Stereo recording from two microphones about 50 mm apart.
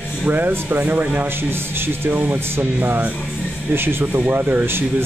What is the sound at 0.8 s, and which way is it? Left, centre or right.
Speech, right.